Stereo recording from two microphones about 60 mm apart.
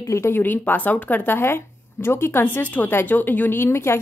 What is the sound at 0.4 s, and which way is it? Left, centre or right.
Speech, left.